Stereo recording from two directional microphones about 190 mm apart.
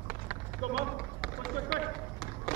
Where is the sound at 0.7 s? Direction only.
Centre (ahead or behind).